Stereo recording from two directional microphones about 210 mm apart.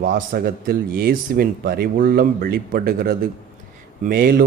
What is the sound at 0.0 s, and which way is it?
A man's voice, 45° right (ahead or behind).